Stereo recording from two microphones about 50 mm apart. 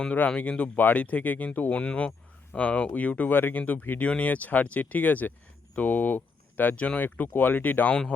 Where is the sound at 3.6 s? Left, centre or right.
Left.